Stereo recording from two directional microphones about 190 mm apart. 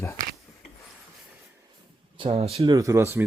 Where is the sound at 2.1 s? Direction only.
30° right (ahead or behind).